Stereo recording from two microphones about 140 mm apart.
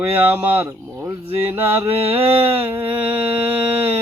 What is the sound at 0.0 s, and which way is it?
Mantra, 15° right (ahead or behind).